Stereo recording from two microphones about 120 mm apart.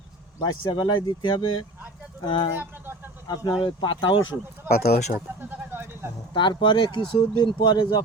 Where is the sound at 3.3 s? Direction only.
35° left (ahead or behind).